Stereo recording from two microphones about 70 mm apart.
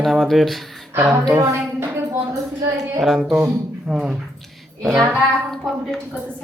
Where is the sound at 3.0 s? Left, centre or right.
Centre.